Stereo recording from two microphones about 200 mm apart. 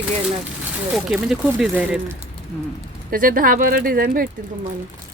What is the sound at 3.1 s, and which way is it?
Speech, 45° right (ahead or behind).